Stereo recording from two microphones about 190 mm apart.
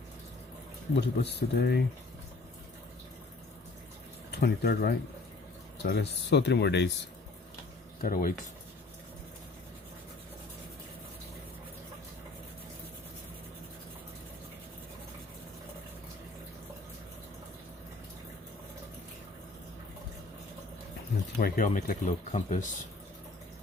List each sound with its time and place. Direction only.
0.9 s speech: 60° left (ahead or behind)
4.3 s speech: 60° left (ahead or behind)
8.0 s speech: 45° left (ahead or behind)
21.3 s speech: 45° left (ahead or behind)